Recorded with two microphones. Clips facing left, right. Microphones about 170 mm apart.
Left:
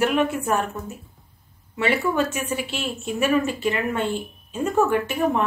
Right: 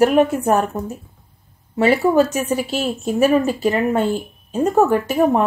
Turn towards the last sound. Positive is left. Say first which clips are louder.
# right 6 dB
turn(degrees=-40)  # may be behind; listen again after turning